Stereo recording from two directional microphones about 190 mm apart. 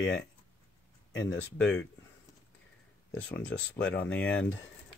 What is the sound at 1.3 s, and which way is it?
Speech, 85° left.